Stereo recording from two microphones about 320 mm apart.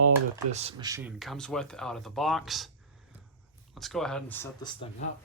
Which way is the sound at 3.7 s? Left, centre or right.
Centre.